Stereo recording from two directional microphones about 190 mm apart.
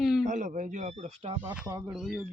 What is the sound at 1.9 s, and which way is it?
Speech, centre (ahead or behind).